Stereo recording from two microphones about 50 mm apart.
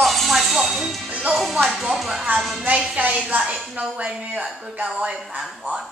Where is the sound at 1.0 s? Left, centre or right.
Right.